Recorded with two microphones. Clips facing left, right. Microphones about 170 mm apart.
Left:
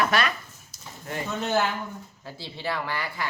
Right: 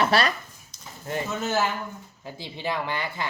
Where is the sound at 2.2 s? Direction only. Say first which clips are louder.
Right 2 dB; 15° right (ahead or behind).